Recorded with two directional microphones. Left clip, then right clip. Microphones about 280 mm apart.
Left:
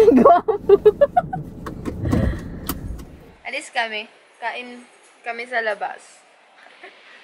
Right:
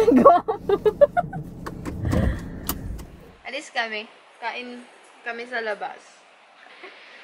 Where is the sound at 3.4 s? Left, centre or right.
Centre.